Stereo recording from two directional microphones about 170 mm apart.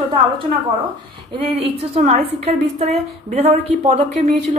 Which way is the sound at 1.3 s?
35° right (ahead or behind).